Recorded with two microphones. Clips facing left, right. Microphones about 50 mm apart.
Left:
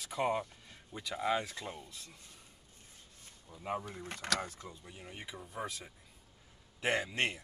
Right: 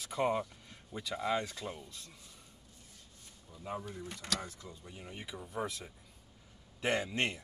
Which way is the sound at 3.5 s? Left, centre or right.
Centre.